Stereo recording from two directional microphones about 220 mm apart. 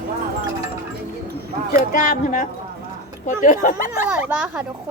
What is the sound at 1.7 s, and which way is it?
Speech, 35° left (ahead or behind).